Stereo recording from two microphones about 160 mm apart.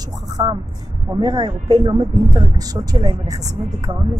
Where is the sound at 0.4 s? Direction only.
25° right (ahead or behind).